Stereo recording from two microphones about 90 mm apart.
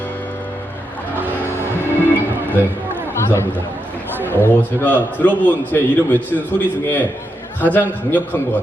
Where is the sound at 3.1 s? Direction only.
30° left (ahead or behind).